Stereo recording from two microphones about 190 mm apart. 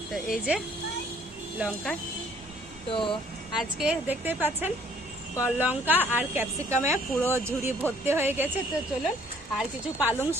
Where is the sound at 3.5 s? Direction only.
5° right (ahead or behind).